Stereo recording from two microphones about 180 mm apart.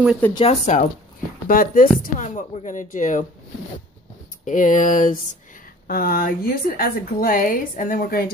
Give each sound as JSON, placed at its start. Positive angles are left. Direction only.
{"t": 0.4, "sound": "speech", "side_deg": 40}
{"t": 1.5, "sound": "a woman's voice", "side_deg": 50}
{"t": 4.5, "sound": "a woman's voice", "side_deg": 45}